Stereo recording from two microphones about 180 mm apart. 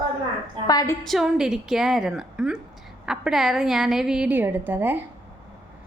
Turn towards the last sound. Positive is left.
turn(degrees=-10)  # may be behind; listen again after turning